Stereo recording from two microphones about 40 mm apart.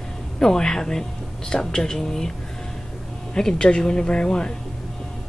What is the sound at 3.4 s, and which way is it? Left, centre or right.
Speech, centre.